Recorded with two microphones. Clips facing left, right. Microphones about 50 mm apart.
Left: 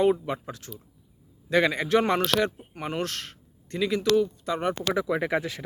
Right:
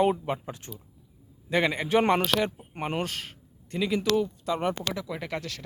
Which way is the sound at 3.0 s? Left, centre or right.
Centre.